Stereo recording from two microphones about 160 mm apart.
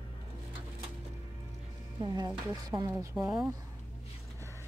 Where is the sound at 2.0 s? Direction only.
25° right (ahead or behind).